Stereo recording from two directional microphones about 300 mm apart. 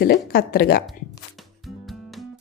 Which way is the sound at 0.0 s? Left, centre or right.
Left.